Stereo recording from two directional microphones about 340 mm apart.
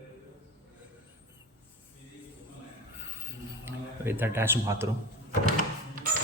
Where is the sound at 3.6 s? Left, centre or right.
Centre.